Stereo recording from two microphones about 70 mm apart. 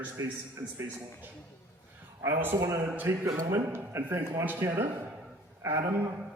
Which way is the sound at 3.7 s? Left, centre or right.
Right.